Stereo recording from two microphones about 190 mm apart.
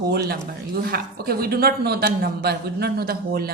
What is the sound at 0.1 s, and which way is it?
Speech, 55° right (ahead or behind).